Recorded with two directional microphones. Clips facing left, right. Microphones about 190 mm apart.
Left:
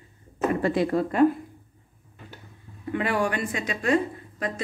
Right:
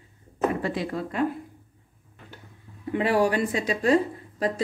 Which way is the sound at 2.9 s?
35° right (ahead or behind).